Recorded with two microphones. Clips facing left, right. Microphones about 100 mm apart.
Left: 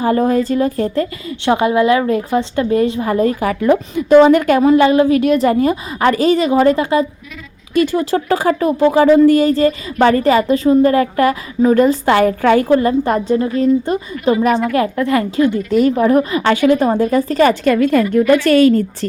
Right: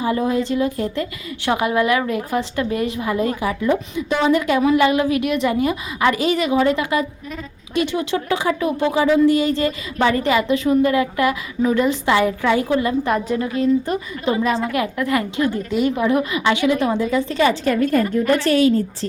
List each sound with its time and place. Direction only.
0.0 s speech: 50° left (ahead or behind)
1.5 s a woman's voice: 30° left (ahead or behind)
3.4 s a woman's voice: 65° left (ahead or behind)
4.7 s a woman's voice: 30° left (ahead or behind)
15.7 s speech: 40° left (ahead or behind)
17.7 s a woman's voice: 80° left
18.1 s a woman's voice: 60° left (ahead or behind)